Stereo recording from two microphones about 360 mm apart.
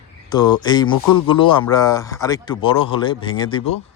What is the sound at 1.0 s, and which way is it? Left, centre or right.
Speech, left.